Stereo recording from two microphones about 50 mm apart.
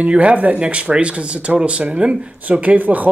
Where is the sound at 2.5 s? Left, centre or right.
Right.